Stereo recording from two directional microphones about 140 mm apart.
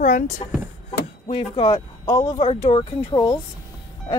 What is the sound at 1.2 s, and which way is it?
Speech, 45° left (ahead or behind).